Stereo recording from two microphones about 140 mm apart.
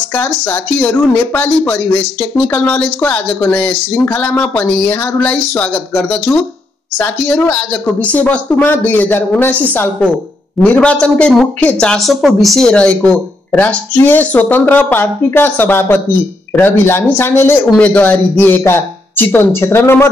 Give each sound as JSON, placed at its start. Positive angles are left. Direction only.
{"t": 0.1, "sound": "speech", "side_deg": 15}